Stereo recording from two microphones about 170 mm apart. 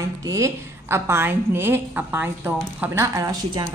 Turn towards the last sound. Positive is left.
turn(degrees=-20)  # may be behind; listen again after turning